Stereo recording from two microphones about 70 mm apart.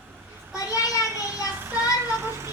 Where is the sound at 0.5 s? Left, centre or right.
Left.